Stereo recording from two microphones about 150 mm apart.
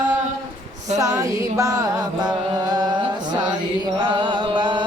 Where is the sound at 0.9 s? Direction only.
25° right (ahead or behind).